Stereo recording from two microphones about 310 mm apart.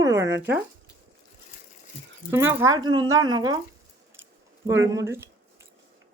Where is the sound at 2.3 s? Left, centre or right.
Centre.